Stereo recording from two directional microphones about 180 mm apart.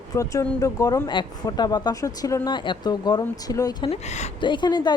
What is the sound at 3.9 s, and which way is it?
Speech, 40° left (ahead or behind).